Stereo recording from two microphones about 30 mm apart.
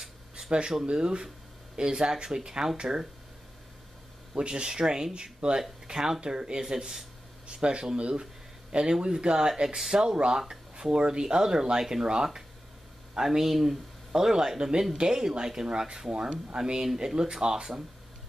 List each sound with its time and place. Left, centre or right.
0.5 s speech: right
2.0 s speech: right
4.4 s speech: right
7.4 s speech: right
9.0 s speech: right
10.5 s a sound: right
11.0 s speech: right
13.2 s speech: centre; by 17.8 s right